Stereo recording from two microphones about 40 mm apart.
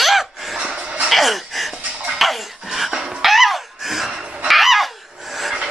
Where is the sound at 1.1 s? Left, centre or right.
Centre.